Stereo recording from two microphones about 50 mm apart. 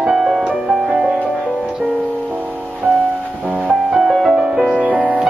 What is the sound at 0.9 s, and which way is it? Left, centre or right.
Music, centre.